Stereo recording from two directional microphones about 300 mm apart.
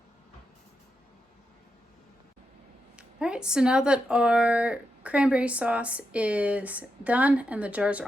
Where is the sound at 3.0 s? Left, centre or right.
Centre.